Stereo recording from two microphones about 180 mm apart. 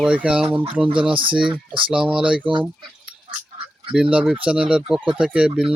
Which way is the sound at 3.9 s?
5° right (ahead or behind).